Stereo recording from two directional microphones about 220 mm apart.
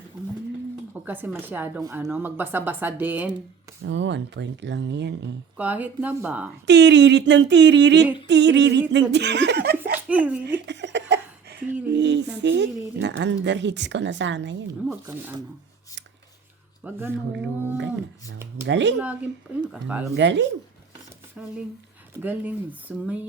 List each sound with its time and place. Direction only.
1.0 s speech: 10° right (ahead or behind)
3.8 s speech: 55° right (ahead or behind)
5.5 s speech: 5° right (ahead or behind)
6.7 s speech: 50° right (ahead or behind)
10.1 s speech: 5° right (ahead or behind)
10.4 s a sound: 50° right (ahead or behind)
11.9 s speech: 50° right (ahead or behind)
15.0 s speech: 10° right (ahead or behind)
16.8 s speech: 10° right (ahead or behind)
17.4 s a sound: 55° right (ahead or behind)
18.7 s speech: 55° right (ahead or behind)
19.6 s speech: 5° right (ahead or behind)
20.1 s a sound: 55° right (ahead or behind)
21.4 s speech: 5° right (ahead or behind)